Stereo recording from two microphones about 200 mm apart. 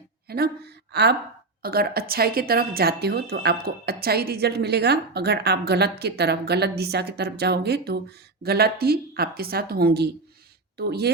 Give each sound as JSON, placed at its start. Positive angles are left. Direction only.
{"t": 0.3, "sound": "speech", "side_deg": -50}